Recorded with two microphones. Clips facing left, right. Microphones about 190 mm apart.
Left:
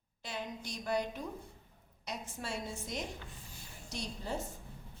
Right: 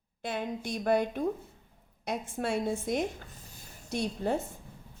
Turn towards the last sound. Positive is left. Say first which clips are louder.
# right 10 dB
turn(degrees=-55)  # may be behind; listen again after turning